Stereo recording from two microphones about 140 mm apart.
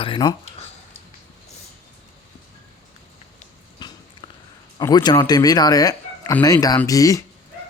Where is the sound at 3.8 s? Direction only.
30° left (ahead or behind).